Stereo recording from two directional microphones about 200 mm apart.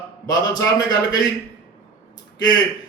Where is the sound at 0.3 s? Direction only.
20° left (ahead or behind).